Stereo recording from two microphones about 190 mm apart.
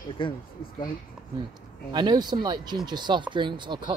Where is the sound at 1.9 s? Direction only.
20° right (ahead or behind).